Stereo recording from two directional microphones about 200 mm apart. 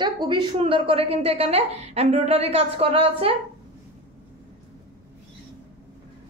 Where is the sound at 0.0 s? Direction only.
25° right (ahead or behind).